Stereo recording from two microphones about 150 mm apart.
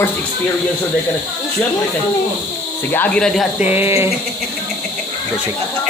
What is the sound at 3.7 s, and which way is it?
Speech, 15° right (ahead or behind).